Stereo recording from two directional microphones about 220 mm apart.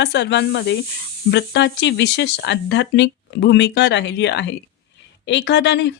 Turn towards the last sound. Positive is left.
turn(degrees=50)  # may be behind; listen again after turning